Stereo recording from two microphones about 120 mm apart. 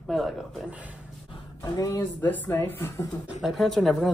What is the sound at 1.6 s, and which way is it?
Speech, 30° left (ahead or behind).